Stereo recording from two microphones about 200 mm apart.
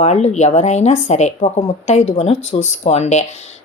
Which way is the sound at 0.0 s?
35° left (ahead or behind).